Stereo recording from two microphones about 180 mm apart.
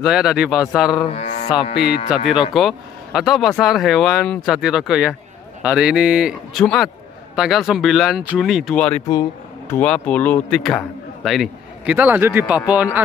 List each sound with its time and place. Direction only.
0.0 s a man's voice: 5° right (ahead or behind)
1.1 s music: 40° left (ahead or behind)
1.5 s cattle: 30° left (ahead or behind)
2.1 s a man's voice: 5° right (ahead or behind)